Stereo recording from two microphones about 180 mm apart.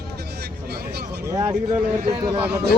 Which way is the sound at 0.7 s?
65° right (ahead or behind).